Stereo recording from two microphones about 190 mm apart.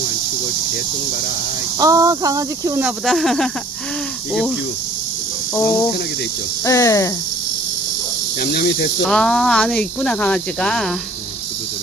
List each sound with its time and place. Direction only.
1.8 s speech: 20° right (ahead or behind)
2.8 s speech: centre (ahead or behind)
6.7 s speech: 15° left (ahead or behind)
8.4 s cricket: 55° left (ahead or behind)
9.0 s speech: centre (ahead or behind)